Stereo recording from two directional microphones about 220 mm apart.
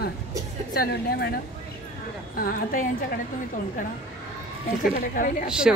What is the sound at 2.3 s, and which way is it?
Speech, 40° left (ahead or behind).